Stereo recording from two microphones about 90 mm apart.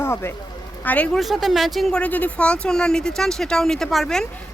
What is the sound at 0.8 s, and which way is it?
Speech, 15° left (ahead or behind).